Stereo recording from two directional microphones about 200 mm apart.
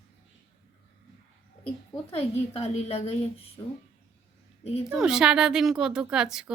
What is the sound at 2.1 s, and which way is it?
A woman's voice, 30° left (ahead or behind).